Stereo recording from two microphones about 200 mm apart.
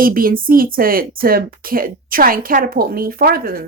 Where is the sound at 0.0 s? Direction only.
45° right (ahead or behind).